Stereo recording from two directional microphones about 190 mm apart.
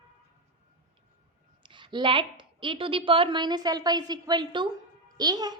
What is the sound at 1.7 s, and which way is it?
A woman's voice, 25° right (ahead or behind).